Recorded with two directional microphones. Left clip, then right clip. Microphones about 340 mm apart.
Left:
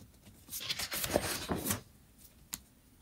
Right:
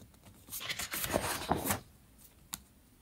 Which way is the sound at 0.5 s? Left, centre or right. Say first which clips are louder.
Left 1 dB; centre.